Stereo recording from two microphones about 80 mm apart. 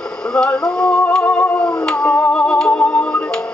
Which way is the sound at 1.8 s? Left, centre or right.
Centre.